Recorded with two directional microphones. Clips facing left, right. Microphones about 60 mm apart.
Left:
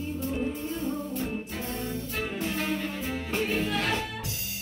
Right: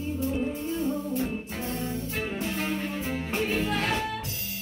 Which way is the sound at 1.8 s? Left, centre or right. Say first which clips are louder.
Right 1 dB; right.